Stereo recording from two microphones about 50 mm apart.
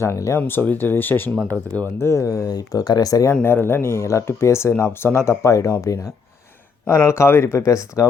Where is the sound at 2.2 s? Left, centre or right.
Left.